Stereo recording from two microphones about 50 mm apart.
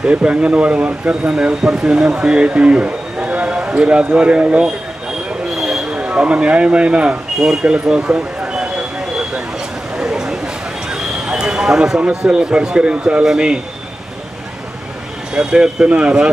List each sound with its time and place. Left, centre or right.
0.0 s speech: right
5.5 s basketball bounce: centre
5.9 s speech: right
7.4 s speech: centre
7.7 s a sound: centre
9.9 s clip-clop: centre
12.1 s speech: centre
15.3 s speech: centre